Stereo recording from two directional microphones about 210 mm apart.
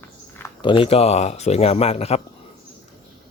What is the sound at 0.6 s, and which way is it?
Speech, 25° left (ahead or behind).